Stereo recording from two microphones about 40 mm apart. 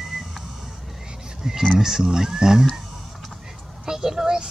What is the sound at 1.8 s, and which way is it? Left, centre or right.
Speech, centre.